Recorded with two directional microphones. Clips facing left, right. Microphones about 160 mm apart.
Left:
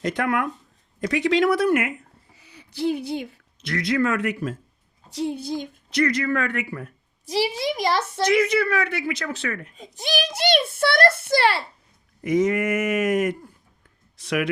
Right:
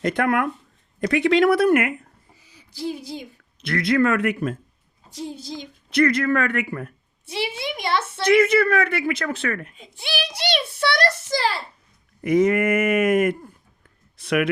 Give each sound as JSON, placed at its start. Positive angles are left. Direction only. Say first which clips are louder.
{"t": 0.0, "sound": "a woman's voice", "louder": "right 3 dB", "side_deg": -55}
{"t": 2.4, "sound": "speech", "louder": "left 5 dB", "side_deg": 65}
{"t": 3.6, "sound": "a woman's voice", "louder": "right 3 dB", "side_deg": -55}
{"t": 5.1, "sound": "a woman's voice", "louder": "left 6 dB", "side_deg": 65}
{"t": 5.9, "sound": "a woman's voice", "louder": "right 3 dB", "side_deg": -55}
{"t": 7.3, "sound": "a child's voice", "louder": "left 4 dB", "side_deg": 40}
{"t": 8.2, "sound": "a woman's voice", "louder": "right 4 dB", "side_deg": -55}
{"t": 9.7, "sound": "a child's voice", "louder": "left 3 dB", "side_deg": 40}
{"t": 12.2, "sound": "a woman's voice", "louder": "right 3 dB", "side_deg": -60}